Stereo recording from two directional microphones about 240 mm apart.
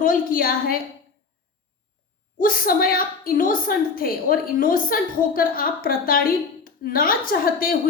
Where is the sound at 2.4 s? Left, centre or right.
Left.